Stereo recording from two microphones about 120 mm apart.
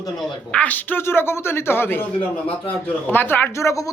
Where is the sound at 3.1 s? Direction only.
15° left (ahead or behind).